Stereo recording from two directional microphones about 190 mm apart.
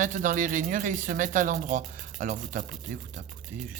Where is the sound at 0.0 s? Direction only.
45° right (ahead or behind).